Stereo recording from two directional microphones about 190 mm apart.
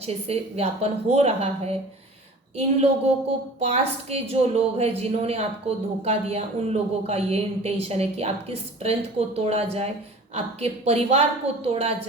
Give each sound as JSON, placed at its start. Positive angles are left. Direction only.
{"t": 0.0, "sound": "a woman's voice", "side_deg": -35}
{"t": 3.6, "sound": "a woman's voice", "side_deg": -35}